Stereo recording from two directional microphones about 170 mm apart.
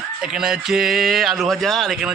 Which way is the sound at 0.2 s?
5° right (ahead or behind).